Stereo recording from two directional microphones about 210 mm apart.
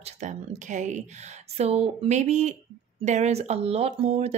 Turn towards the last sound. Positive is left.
turn(degrees=-30)  # may be behind; listen again after turning